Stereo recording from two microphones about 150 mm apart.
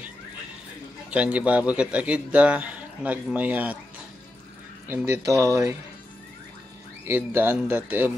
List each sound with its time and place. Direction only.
1.1 s a man's voice: 10° right (ahead or behind)
4.8 s speech: 15° right (ahead or behind)
7.1 s a man's voice: 15° right (ahead or behind)